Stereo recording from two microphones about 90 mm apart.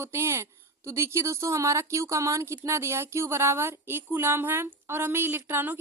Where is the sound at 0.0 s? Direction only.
30° right (ahead or behind).